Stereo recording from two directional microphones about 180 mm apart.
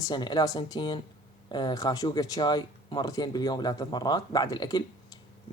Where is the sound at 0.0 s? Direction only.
25° left (ahead or behind).